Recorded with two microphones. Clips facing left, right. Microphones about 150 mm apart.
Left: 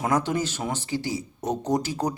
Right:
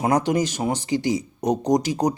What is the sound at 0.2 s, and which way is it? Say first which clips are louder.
Speech: right 5 dB; 15° right (ahead or behind).